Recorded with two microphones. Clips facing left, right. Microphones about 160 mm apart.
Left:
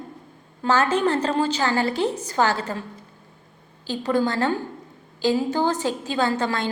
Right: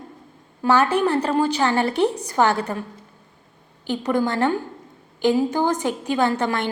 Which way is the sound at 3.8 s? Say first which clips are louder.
Right 1 dB; 15° right (ahead or behind).